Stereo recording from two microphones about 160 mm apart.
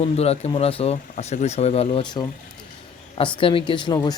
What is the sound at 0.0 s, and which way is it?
A man's voice, 40° left (ahead or behind).